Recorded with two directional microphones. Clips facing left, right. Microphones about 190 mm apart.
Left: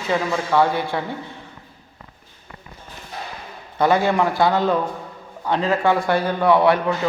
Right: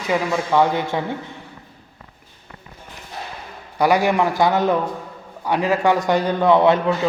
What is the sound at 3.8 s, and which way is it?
A man's voice, 15° right (ahead or behind).